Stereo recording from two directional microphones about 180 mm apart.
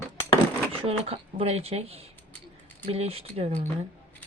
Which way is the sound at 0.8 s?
35° right (ahead or behind).